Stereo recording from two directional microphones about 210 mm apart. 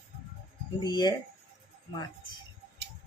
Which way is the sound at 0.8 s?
20° left (ahead or behind).